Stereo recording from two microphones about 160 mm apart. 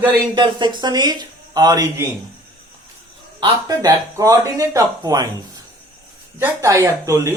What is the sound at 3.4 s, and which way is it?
Speech, 20° right (ahead or behind).